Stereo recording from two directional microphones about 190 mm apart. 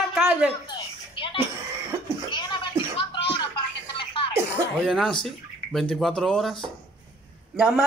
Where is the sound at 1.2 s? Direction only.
25° left (ahead or behind).